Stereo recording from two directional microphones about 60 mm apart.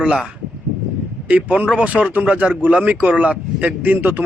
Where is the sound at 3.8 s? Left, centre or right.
Right.